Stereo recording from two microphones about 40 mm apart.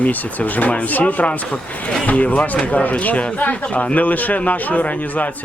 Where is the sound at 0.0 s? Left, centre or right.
Left.